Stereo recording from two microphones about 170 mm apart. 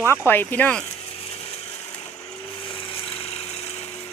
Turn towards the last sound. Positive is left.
turn(degrees=40)  # may be behind; listen again after turning